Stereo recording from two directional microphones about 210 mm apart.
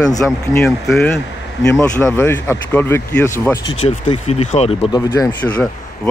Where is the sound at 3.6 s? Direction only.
25° left (ahead or behind).